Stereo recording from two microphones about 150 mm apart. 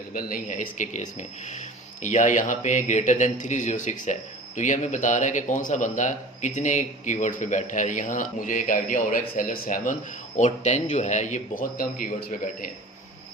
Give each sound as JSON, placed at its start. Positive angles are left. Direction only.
{"t": 0.1, "sound": "speech", "side_deg": 70}